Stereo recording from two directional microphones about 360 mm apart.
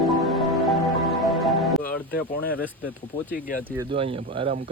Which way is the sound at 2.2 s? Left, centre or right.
Left.